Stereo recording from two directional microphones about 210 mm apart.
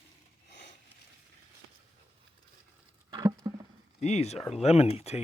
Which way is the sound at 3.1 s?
20° right (ahead or behind).